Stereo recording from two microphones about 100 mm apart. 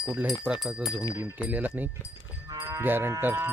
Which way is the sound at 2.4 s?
35° right (ahead or behind).